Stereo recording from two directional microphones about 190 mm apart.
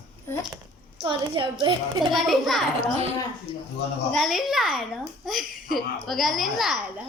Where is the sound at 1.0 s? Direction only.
25° right (ahead or behind).